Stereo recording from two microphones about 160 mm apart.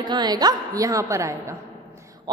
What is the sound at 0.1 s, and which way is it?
A woman's voice, 25° right (ahead or behind).